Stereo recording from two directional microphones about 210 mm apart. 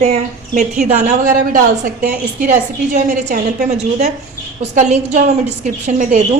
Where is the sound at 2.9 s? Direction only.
40° right (ahead or behind).